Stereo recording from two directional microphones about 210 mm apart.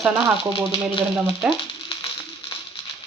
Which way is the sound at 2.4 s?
25° left (ahead or behind).